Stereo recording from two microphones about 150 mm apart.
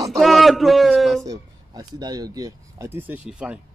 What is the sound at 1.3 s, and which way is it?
Speech, 25° right (ahead or behind).